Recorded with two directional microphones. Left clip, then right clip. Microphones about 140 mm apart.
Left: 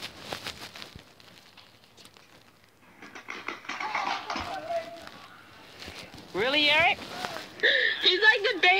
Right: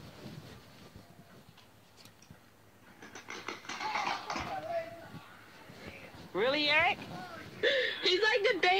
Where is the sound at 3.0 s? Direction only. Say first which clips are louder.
Left 5 dB; 20° left (ahead or behind).